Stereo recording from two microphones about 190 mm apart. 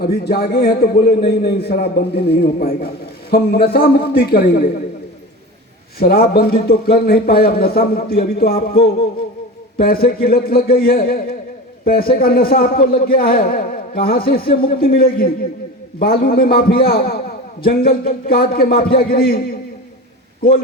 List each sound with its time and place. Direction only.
0.0 s a man's voice: 55° left (ahead or behind)
6.0 s a man's voice: 55° left (ahead or behind)